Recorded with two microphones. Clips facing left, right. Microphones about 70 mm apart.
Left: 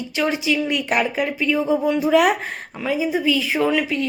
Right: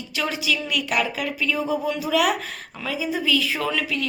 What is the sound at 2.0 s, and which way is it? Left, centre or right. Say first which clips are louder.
A woman's voice: left 5 dB; left.